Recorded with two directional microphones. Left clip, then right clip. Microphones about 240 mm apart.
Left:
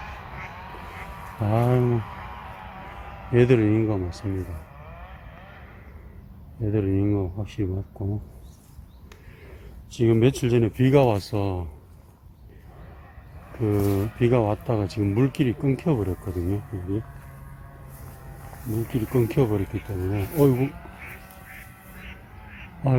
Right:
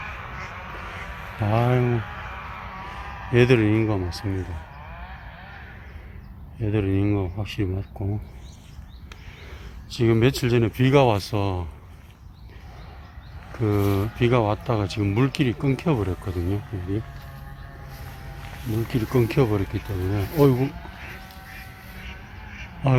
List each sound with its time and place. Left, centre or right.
0.0 s quack: left
1.4 s speech: centre
2.0 s a sound: left
3.3 s speech: centre
6.6 s speech: centre
9.9 s speech: centre
13.6 s speech: centre
18.8 s speech: centre